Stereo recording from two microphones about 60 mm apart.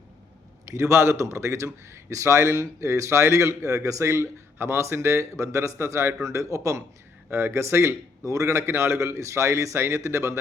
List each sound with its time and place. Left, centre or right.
0.6 s speech: right
6.2 s a man's voice: right
7.3 s speech: right
8.2 s speech: right